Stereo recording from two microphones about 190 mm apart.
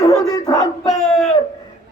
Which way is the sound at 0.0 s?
20° left (ahead or behind).